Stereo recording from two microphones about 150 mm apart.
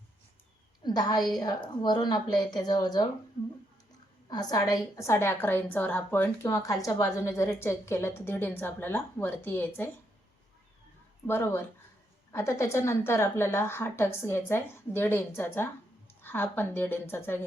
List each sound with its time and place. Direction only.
0.9 s a woman's voice: 25° left (ahead or behind)
4.3 s a woman's voice: 25° left (ahead or behind)
11.3 s a woman's voice: 15° left (ahead or behind)